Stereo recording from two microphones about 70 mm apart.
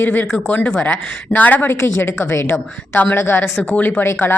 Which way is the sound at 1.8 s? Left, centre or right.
Left.